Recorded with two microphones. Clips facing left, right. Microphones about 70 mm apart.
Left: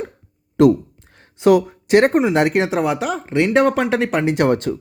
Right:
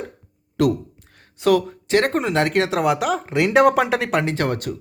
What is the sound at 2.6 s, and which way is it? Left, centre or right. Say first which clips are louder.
Speech: even; centre.